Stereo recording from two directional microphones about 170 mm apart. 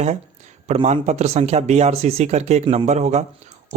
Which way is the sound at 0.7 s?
40° right (ahead or behind).